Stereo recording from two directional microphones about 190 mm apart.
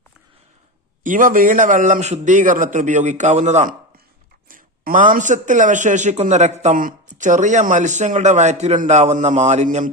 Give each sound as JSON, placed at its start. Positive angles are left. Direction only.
{"t": 1.0, "sound": "a man's voice", "side_deg": -45}